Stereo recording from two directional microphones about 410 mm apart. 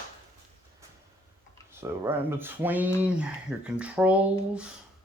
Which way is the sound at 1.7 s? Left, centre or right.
Centre.